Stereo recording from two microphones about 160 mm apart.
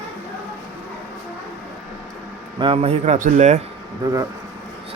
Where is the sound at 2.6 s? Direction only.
35° right (ahead or behind).